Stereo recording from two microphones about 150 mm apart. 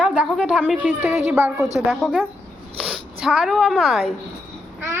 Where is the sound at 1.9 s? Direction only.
5° right (ahead or behind).